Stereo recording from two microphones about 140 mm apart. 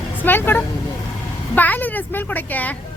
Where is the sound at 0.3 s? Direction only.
15° left (ahead or behind).